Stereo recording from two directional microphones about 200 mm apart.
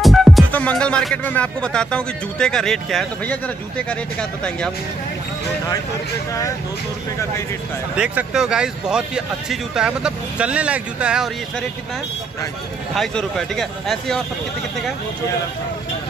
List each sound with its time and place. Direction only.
0.0 s speech: centre (ahead or behind)
7.9 s speech: 5° right (ahead or behind)
12.9 s speech: centre (ahead or behind)